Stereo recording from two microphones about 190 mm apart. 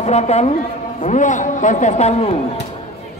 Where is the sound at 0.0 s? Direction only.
35° left (ahead or behind).